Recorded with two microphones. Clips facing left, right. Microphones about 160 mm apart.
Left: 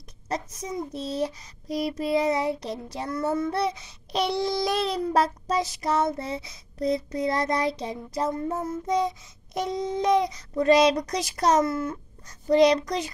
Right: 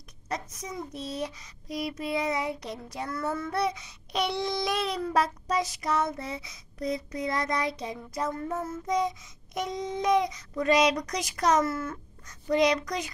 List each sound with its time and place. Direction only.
0.3 s child singing: 30° left (ahead or behind)
3.1 s child singing: 20° left (ahead or behind)
11.6 s a child's voice: 20° left (ahead or behind)
12.3 s child singing: 35° left (ahead or behind)